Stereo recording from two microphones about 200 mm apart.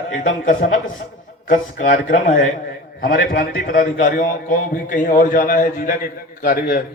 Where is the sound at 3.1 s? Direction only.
45° left (ahead or behind).